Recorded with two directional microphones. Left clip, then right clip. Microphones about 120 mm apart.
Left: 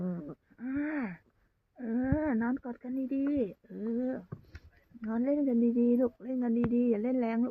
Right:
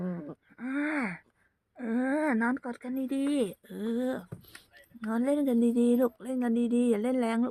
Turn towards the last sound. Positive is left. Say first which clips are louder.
# right 2 dB
turn(degrees=-25)  # may be behind; listen again after turning